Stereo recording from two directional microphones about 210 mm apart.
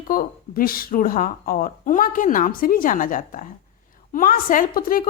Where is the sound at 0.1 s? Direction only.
45° left (ahead or behind).